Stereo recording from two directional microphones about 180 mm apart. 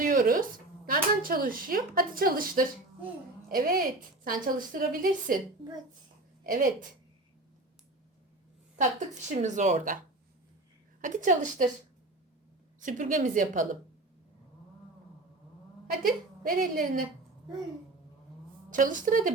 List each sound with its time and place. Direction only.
0.0 s a sound: 50° right (ahead or behind)
0.9 s a woman's voice: 55° right (ahead or behind)
6.4 s a woman's voice: 55° right (ahead or behind)
8.8 s a woman's voice: 45° right (ahead or behind)
11.0 s a woman's voice: 45° right (ahead or behind)
12.8 s a woman's voice: 45° right (ahead or behind)
15.9 s a woman's voice: 55° right (ahead or behind)
18.7 s a woman's voice: 45° right (ahead or behind)